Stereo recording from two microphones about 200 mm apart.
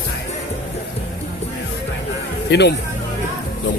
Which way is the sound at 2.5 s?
60° left (ahead or behind).